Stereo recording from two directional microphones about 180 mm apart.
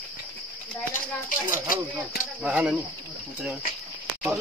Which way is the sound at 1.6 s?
50° left (ahead or behind).